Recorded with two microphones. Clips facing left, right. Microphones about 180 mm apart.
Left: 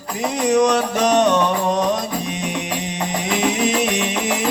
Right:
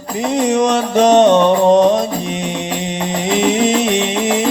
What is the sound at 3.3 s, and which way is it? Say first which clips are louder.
Music: right 5 dB; 25° right (ahead or behind).